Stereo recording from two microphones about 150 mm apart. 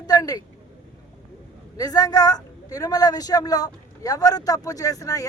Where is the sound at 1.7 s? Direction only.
25° left (ahead or behind).